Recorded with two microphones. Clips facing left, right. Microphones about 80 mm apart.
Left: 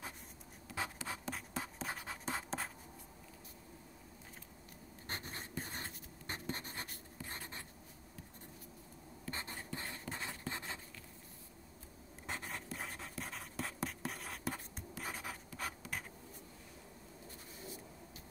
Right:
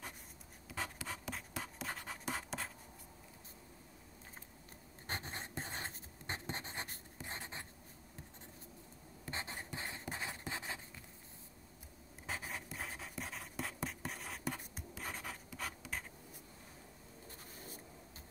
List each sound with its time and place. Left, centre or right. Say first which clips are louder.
1.0 s writing: left 1 dB; centre
1.3 s writing: left 2 dB; centre
1.9 s writing: left 1 dB; centre
5.0 s writing: right 2 dB; right
9.2 s writing: right 1 dB; right
12.3 s writing: even; centre